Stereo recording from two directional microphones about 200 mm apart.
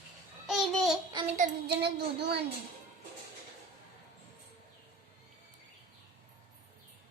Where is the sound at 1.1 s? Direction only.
35° right (ahead or behind).